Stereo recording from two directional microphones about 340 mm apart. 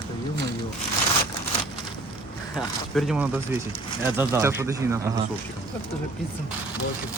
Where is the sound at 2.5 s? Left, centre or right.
Centre.